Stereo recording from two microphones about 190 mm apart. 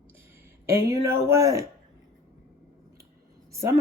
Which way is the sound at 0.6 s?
15° right (ahead or behind).